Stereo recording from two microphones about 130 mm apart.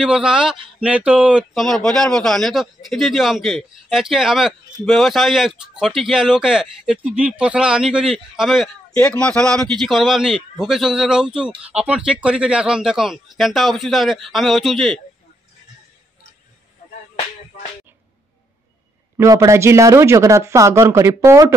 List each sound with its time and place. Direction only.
0.0 s a man's voice: 5° right (ahead or behind)
8.9 s a man's voice: 10° left (ahead or behind)
19.1 s speech: 25° right (ahead or behind)